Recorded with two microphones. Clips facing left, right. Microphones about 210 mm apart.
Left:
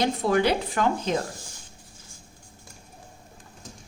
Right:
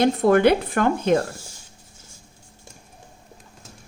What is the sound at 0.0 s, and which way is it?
Speech, 55° right (ahead or behind).